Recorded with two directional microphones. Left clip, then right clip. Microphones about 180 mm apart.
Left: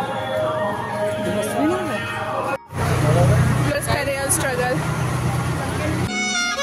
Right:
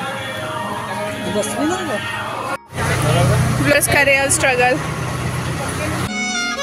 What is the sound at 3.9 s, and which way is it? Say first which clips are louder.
Speech: right 8 dB; 25° right (ahead or behind).